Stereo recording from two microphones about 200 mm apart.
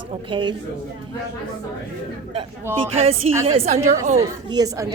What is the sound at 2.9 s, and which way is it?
Speech, 30° right (ahead or behind).